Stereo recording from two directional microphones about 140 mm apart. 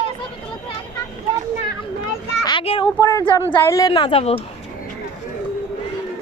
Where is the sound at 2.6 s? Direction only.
40° left (ahead or behind).